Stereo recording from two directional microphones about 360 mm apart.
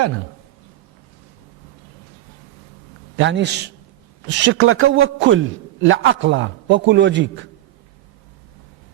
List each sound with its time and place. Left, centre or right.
3.2 s a man's voice: right